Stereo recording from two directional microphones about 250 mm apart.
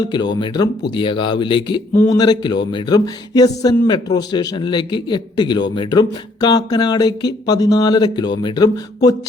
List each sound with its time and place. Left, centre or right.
0.0 s speech: centre